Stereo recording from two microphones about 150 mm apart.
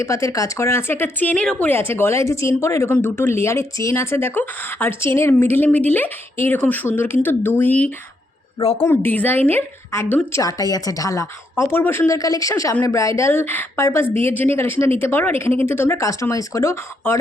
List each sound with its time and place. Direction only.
0.0 s a woman's voice: 20° left (ahead or behind)